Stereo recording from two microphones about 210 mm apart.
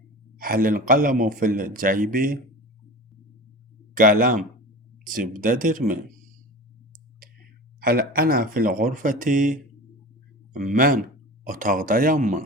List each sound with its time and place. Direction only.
0.3 s speech: 40° right (ahead or behind)
3.9 s speech: 40° right (ahead or behind)
7.8 s speech: 45° right (ahead or behind)